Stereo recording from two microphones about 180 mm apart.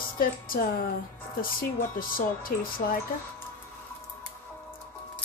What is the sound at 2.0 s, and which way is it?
Speech, 50° left (ahead or behind).